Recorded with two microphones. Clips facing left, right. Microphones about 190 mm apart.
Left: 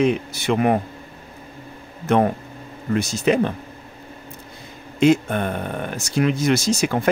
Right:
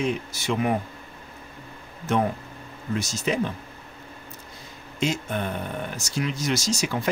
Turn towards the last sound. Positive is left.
turn(degrees=55)  # may be behind; listen again after turning